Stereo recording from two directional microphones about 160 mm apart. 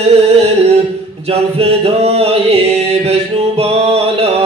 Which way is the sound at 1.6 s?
40° right (ahead or behind).